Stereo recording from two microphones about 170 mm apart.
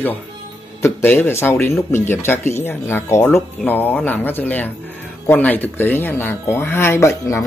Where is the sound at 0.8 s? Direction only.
10° left (ahead or behind).